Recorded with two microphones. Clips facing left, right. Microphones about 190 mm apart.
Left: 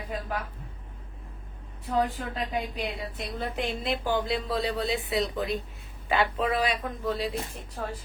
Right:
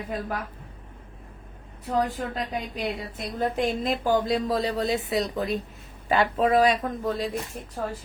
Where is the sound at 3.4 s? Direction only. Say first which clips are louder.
Right 7 dB; 45° right (ahead or behind).